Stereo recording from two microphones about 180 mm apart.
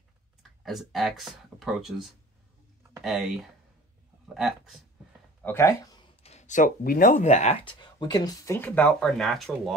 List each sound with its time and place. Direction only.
0.4 s speech: centre (ahead or behind)
5.4 s speech: 15° left (ahead or behind)
6.2 s speech: 40° left (ahead or behind)
8.0 s speech: 20° left (ahead or behind); by 9.8 s centre (ahead or behind)